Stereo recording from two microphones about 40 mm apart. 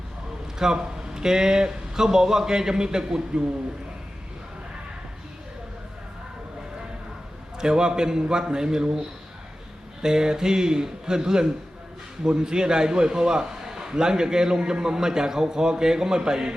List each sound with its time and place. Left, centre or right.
0.6 s a man's voice: centre
7.6 s a man's voice: centre